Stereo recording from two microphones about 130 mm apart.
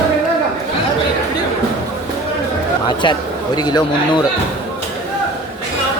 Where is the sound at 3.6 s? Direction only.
35° left (ahead or behind).